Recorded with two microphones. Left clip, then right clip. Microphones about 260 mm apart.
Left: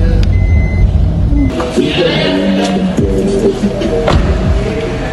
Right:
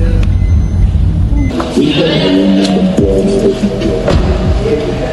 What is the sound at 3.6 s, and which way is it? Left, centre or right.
Music, centre.